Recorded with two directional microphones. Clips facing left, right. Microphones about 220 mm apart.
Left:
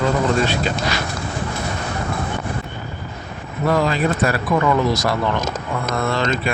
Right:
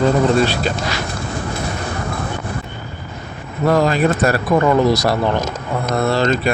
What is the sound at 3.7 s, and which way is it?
Speech, 40° right (ahead or behind).